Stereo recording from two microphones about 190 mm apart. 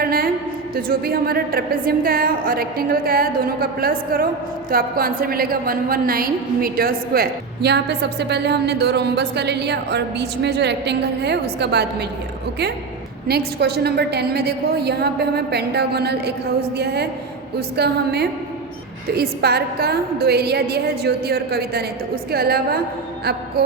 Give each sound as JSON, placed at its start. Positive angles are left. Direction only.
{"t": 0.0, "sound": "a sound", "side_deg": -50}
{"t": 0.8, "sound": "a woman's voice", "side_deg": -50}
{"t": 13.2, "sound": "a woman's voice", "side_deg": -55}